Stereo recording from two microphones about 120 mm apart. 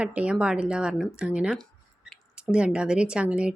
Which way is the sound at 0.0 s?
10° right (ahead or behind).